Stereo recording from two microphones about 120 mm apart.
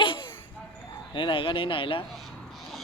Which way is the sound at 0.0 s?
45° left (ahead or behind).